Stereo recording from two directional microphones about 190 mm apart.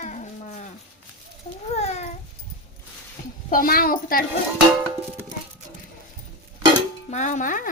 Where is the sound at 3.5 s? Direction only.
50° left (ahead or behind).